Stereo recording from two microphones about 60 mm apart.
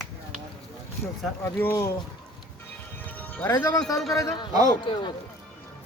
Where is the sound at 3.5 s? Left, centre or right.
Left.